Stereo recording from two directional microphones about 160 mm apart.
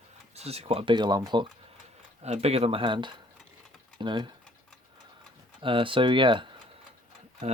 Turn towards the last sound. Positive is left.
turn(degrees=-45)  # may be behind; listen again after turning